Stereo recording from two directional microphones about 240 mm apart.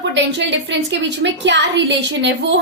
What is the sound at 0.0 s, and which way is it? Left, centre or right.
A woman's voice, right.